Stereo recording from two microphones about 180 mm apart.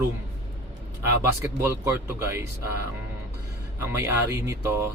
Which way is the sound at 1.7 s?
15° right (ahead or behind).